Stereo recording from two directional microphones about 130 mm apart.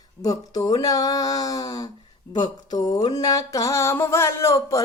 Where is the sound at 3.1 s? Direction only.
30° left (ahead or behind).